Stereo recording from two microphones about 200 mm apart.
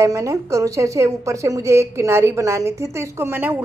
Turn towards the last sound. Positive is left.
turn(degrees=-10)  # may be behind; listen again after turning